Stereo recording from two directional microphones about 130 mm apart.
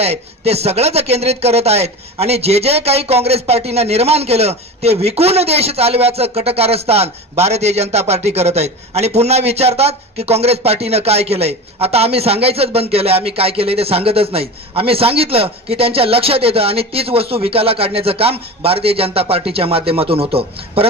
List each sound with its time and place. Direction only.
0.0 s speech: 55° right (ahead or behind)